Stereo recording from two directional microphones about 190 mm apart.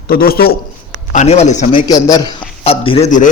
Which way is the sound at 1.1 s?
35° left (ahead or behind).